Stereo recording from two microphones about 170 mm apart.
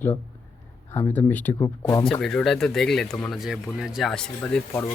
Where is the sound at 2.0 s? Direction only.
Centre (ahead or behind).